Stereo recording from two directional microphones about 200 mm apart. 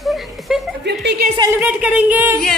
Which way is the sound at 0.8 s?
60° right (ahead or behind).